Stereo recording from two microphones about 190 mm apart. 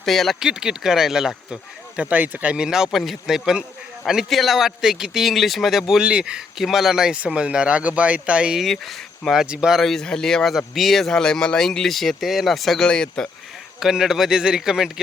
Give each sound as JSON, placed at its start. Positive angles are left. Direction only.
{"t": 0.0, "sound": "speech", "side_deg": 0}